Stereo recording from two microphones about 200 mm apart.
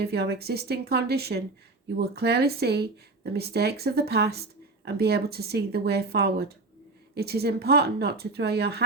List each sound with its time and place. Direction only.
0.0 s speech: 55° right (ahead or behind)